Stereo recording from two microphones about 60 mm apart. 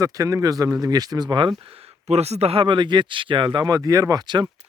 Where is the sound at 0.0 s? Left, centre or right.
Right.